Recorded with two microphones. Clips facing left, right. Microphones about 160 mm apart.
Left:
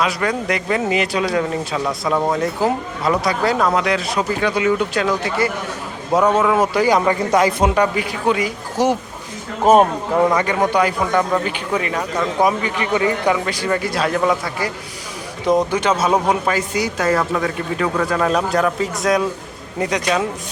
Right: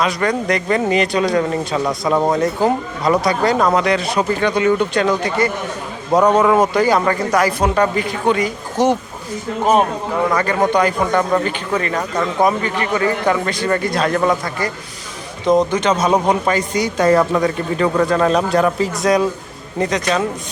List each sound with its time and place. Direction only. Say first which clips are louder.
0.0 s speech: right 2 dB; 5° left (ahead or behind); by 7.9 s 20° left (ahead or behind)
7.9 s speech: right 2 dB; 10° left (ahead or behind)
10.2 s speech: even; 15° left (ahead or behind)
10.7 s speech: right 2 dB; 5° left (ahead or behind)
13.3 s speech: right 2 dB; 10° left (ahead or behind)